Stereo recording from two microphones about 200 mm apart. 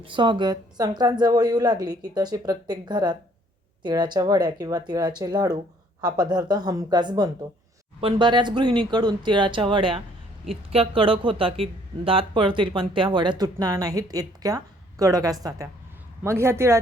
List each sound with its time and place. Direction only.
0.0 s a man's voice: 25° right (ahead or behind)